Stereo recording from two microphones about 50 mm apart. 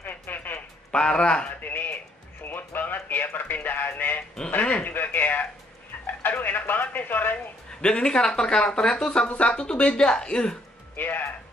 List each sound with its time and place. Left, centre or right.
0.0 s music: left
0.9 s speech: centre
1.6 s a sound: left
6.0 s chicken: left
7.8 s speech: centre
11.0 s music: left